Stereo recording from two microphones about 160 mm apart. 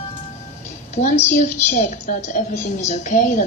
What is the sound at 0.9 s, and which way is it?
A woman's voice, 45° left (ahead or behind).